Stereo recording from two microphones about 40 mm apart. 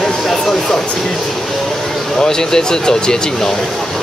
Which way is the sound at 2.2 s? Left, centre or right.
Centre.